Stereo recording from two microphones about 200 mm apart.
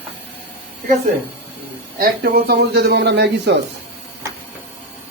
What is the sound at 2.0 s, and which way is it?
Speech, 50° right (ahead or behind).